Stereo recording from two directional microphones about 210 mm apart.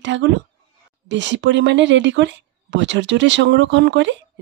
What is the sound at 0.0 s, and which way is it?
Speech, 60° right (ahead or behind).